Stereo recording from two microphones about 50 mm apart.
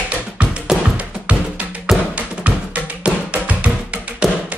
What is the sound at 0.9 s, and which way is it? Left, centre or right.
Music, right.